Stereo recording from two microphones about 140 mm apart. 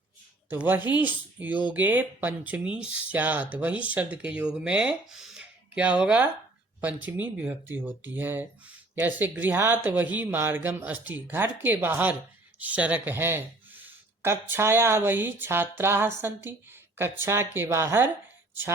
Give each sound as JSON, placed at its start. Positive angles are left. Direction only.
{"t": 0.5, "sound": "speech", "side_deg": -15}